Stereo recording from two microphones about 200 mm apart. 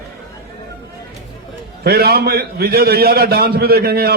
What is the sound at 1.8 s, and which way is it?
A man's voice, 50° right (ahead or behind).